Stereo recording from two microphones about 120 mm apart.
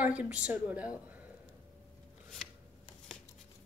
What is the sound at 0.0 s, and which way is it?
A woman's voice, 10° right (ahead or behind).